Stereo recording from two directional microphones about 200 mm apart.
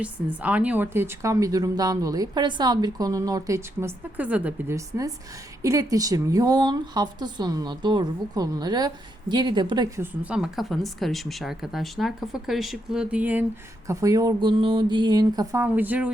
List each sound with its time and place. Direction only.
0.0 s a woman's voice: 5° right (ahead or behind)